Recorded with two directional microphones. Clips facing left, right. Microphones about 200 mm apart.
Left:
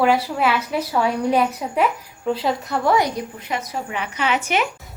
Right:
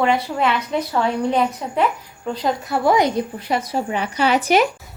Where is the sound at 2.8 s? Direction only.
20° right (ahead or behind).